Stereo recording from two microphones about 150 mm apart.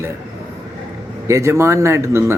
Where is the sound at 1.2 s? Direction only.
20° right (ahead or behind).